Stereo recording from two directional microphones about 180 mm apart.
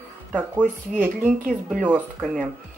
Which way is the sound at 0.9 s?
5° right (ahead or behind).